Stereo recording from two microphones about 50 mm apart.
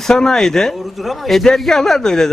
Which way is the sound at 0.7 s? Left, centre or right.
Centre.